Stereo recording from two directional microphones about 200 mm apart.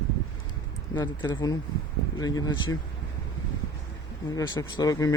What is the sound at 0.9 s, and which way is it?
Speech, 20° left (ahead or behind).